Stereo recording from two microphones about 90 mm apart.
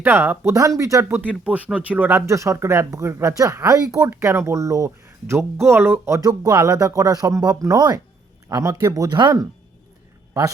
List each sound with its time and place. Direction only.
0.0 s speech: 25° right (ahead or behind)
0.8 s speech: 40° right (ahead or behind)
1.0 s speech: 20° right (ahead or behind); by 9.1 s 40° right (ahead or behind)